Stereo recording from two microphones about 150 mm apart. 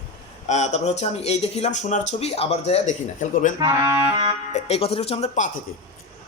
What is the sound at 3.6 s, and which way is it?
Speech, 25° right (ahead or behind).